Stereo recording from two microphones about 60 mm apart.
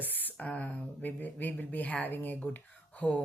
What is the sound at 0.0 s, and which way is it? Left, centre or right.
Speech, left.